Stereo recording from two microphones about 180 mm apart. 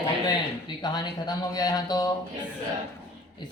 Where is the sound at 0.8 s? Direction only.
25° left (ahead or behind).